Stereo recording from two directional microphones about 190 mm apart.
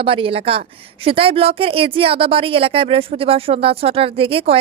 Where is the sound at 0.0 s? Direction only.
30° right (ahead or behind).